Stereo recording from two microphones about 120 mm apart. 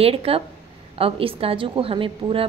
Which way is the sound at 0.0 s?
50° right (ahead or behind).